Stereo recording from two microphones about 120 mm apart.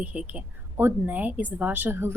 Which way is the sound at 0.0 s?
10° right (ahead or behind).